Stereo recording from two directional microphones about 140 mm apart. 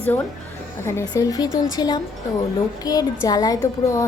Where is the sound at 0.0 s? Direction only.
15° left (ahead or behind).